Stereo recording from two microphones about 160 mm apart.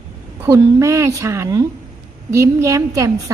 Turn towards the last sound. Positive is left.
turn(degrees=-20)  # may be behind; listen again after turning